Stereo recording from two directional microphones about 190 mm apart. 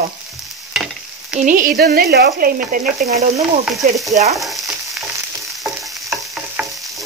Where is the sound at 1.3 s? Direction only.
40° right (ahead or behind).